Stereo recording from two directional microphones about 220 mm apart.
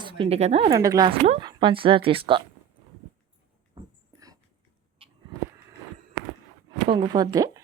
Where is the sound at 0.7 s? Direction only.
15° right (ahead or behind).